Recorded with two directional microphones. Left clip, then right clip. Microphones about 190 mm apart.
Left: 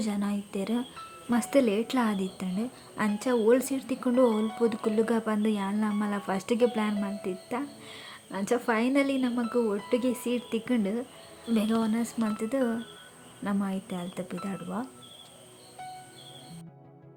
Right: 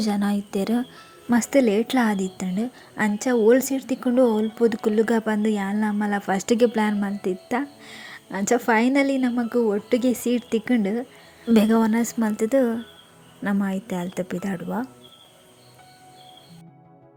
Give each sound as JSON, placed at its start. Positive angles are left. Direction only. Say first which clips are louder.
{"t": 0.0, "sound": "speech", "louder": "right 8 dB", "side_deg": -30}